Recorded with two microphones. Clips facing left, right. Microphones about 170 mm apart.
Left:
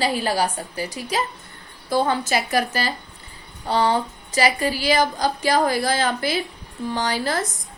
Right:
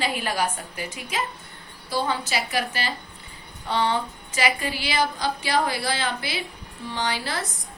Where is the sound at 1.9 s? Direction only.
50° left (ahead or behind).